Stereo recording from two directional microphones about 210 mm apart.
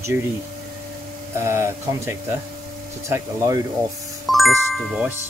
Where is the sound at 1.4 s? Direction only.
15° right (ahead or behind).